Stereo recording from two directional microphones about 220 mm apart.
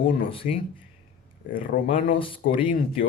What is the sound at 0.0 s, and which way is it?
Speech, 40° left (ahead or behind).